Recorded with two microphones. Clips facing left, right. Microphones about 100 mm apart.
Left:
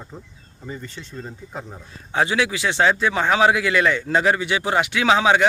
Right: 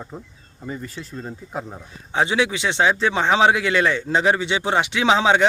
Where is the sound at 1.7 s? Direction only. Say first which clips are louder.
Right 1 dB; 20° right (ahead or behind).